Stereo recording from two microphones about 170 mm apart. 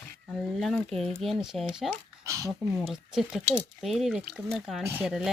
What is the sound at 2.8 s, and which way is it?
A child's voice, centre (ahead or behind).